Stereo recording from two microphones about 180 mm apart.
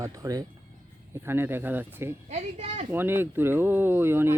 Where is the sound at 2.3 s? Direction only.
40° right (ahead or behind).